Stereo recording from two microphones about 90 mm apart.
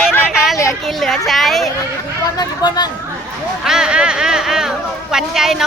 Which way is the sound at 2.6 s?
50° left (ahead or behind).